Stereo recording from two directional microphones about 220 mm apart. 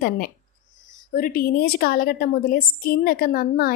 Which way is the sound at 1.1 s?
40° left (ahead or behind).